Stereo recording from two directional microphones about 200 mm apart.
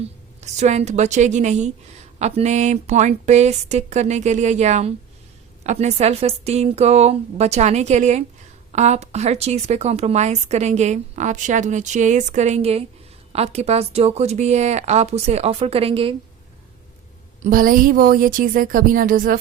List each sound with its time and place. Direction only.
0.4 s speech: 35° right (ahead or behind)
17.4 s a woman's voice: 45° right (ahead or behind)